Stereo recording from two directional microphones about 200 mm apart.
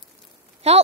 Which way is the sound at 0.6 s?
30° right (ahead or behind).